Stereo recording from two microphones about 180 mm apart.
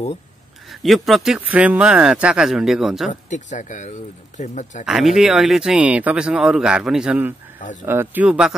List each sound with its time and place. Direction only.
0.7 s speech: centre (ahead or behind)
3.1 s speech: 45° left (ahead or behind)
4.8 s a man's voice: centre (ahead or behind)